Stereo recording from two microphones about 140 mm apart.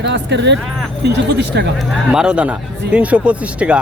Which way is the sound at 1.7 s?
5° right (ahead or behind).